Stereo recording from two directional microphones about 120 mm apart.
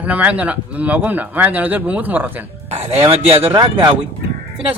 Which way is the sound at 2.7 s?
60° right (ahead or behind).